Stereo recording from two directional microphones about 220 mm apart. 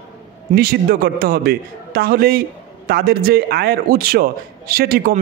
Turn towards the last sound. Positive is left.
turn(degrees=-40)  # may be behind; listen again after turning